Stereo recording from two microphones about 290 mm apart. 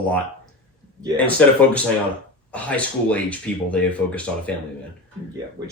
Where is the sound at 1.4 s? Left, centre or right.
Centre.